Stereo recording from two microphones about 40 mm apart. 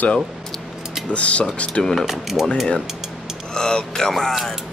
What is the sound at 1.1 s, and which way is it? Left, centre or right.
Speech, left.